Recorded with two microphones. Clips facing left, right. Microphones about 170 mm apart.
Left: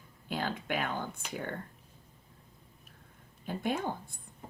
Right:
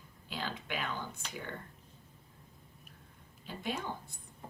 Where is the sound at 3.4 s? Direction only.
50° left (ahead or behind).